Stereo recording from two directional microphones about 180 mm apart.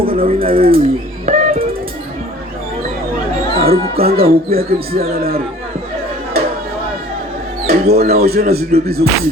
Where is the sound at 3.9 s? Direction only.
55° right (ahead or behind).